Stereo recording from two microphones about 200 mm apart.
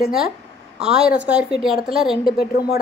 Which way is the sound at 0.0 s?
Centre (ahead or behind).